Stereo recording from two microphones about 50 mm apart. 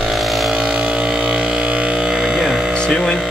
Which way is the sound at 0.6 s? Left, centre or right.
Right.